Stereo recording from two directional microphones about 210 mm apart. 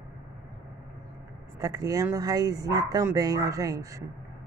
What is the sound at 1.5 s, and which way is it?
Speech, 15° right (ahead or behind).